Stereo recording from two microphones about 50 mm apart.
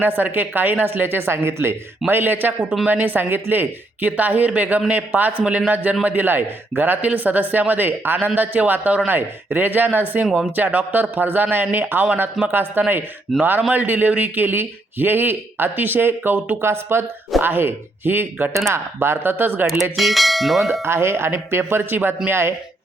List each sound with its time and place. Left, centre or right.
0.0 s speech: right
2.0 s a man's voice: right
18.7 s speech: right
20.0 s bell: centre
20.8 s speech: right
22.3 s speech: right